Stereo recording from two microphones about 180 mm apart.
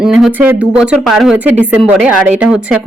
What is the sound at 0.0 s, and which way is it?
Speech, centre (ahead or behind).